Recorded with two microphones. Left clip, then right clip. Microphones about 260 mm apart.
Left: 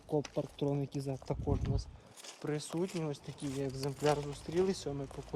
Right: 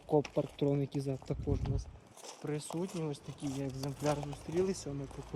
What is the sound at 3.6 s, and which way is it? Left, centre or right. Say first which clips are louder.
Speech: left 3 dB; left.